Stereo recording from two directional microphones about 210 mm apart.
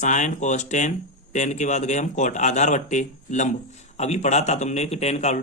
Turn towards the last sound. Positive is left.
turn(degrees=35)  # may be behind; listen again after turning